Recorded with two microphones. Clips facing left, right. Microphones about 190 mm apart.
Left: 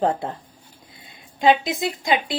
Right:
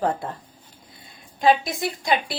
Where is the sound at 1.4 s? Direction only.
20° left (ahead or behind).